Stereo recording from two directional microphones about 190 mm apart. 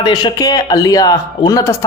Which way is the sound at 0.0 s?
20° left (ahead or behind).